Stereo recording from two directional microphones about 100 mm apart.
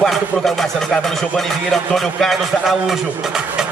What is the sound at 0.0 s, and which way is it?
A man's voice, centre (ahead or behind).